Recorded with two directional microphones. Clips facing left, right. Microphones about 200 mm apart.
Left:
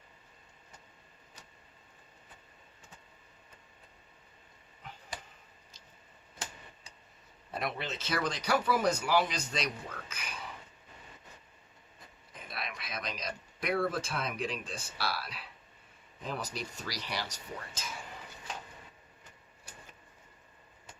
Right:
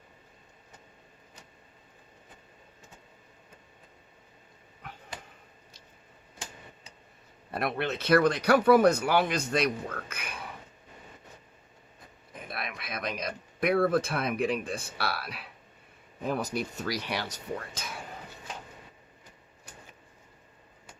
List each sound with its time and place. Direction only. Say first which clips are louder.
7.5 s speech: right 6 dB; 60° right (ahead or behind)
12.3 s speech: right 4 dB; 55° right (ahead or behind)
17.7 s a sound: right 3 dB; 60° right (ahead or behind)